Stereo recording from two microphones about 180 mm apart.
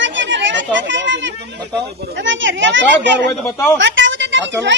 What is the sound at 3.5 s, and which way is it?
Speech, 15° left (ahead or behind).